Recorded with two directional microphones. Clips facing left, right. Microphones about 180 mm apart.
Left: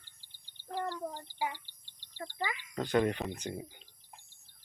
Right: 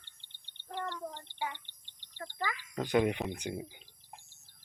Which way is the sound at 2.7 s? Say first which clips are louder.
Right 1 dB; 10° right (ahead or behind).